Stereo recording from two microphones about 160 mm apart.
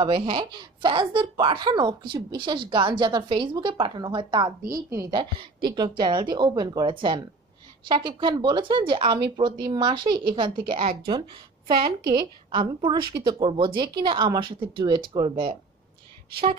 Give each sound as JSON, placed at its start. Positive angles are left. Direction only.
{"t": 0.0, "sound": "a woman's voice", "side_deg": -35}